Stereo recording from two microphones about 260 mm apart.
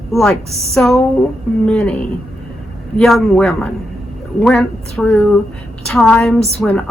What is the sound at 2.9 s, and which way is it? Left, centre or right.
A woman's voice, centre.